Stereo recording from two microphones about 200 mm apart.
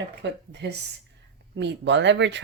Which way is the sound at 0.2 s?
60° right (ahead or behind).